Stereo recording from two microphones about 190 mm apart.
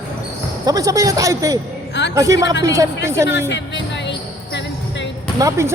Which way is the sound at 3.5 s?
70° left (ahead or behind).